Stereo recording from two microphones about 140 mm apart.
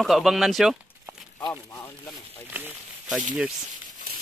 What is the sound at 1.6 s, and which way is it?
Speech, 15° left (ahead or behind).